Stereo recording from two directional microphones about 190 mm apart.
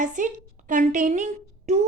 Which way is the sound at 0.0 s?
40° right (ahead or behind).